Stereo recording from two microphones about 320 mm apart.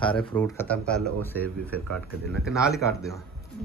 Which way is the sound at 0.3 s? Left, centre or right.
Centre.